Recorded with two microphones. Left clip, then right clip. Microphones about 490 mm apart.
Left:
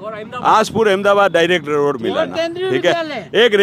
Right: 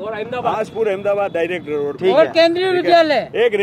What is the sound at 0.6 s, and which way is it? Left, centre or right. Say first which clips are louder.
A man's voice: left 5 dB; left.